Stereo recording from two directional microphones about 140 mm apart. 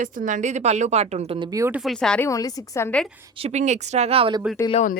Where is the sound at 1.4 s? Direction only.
25° right (ahead or behind).